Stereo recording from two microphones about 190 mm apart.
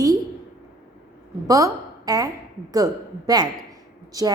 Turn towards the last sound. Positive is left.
turn(degrees=-20)  # may be behind; listen again after turning